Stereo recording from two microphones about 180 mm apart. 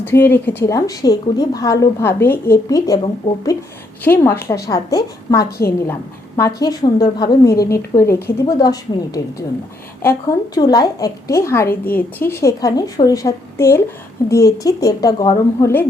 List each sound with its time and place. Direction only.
0.0 s speech: 10° left (ahead or behind)
4.0 s a woman's voice: 10° left (ahead or behind)